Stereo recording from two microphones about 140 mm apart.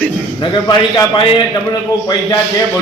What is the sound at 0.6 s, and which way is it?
Speech, 25° left (ahead or behind).